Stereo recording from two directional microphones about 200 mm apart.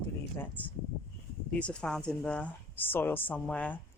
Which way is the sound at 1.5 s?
5° left (ahead or behind).